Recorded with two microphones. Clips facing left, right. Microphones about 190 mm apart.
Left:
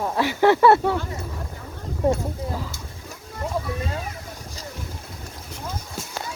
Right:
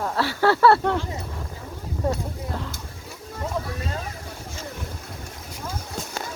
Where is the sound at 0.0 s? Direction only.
15° left (ahead or behind).